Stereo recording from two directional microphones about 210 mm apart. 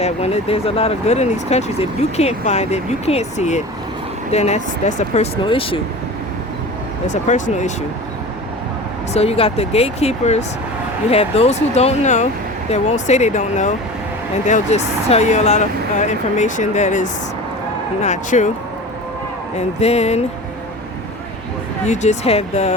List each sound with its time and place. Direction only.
0.0 s speech: 30° left (ahead or behind)
7.1 s speech: 35° left (ahead or behind)
9.1 s speech: 30° left (ahead or behind)
19.5 s speech: 30° left (ahead or behind)
21.8 s speech: 35° left (ahead or behind)